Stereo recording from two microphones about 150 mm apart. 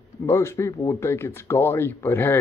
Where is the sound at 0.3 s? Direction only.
20° left (ahead or behind).